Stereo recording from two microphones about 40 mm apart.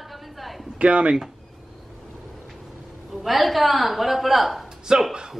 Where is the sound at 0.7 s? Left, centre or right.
Right.